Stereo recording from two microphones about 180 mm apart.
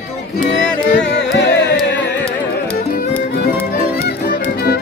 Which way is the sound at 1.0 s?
70° left (ahead or behind).